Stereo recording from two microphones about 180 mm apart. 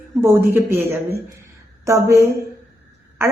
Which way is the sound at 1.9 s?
15° right (ahead or behind).